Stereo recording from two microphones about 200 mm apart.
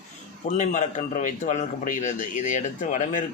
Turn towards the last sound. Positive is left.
turn(degrees=40)  # may be behind; listen again after turning